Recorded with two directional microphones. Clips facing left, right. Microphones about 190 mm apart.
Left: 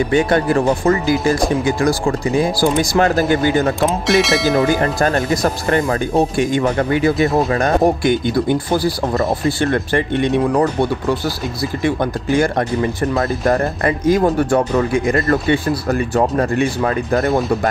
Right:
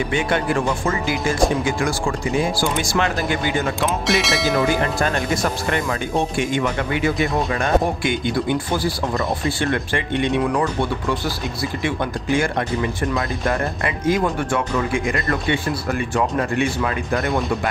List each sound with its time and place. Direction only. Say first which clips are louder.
0.1 s speech: left 7 dB; 40° left (ahead or behind)
4.1 s speech: left 6 dB; centre (ahead or behind)
4.8 s speech: left 5 dB; 40° left (ahead or behind)